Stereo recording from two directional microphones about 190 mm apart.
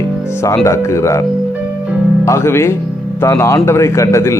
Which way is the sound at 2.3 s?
15° left (ahead or behind).